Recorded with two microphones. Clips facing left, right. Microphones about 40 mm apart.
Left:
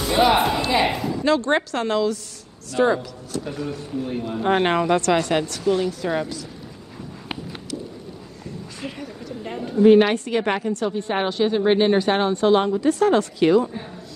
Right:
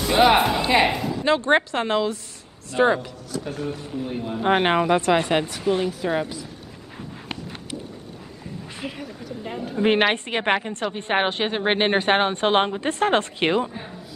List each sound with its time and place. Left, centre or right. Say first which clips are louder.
0.1 s speech: right 1 dB; centre
0.8 s speech: even; centre
1.2 s a woman's voice: right 1 dB; right
3.9 s speech: left 2 dB; centre
4.4 s speech: even; centre
8.8 s a sound: left 1 dB; centre
9.8 s a woman's voice: left 6 dB; right